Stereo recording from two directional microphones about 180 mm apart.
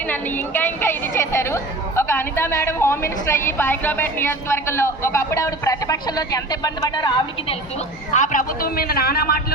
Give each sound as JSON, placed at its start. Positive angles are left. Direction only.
{"t": 0.1, "sound": "a woman's voice", "side_deg": 10}
{"t": 8.1, "sound": "a man's voice", "side_deg": 45}